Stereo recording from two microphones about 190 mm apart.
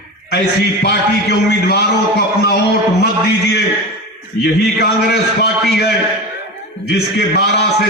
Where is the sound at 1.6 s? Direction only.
55° left (ahead or behind).